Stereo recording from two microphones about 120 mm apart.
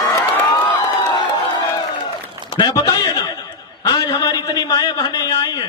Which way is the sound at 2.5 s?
35° left (ahead or behind).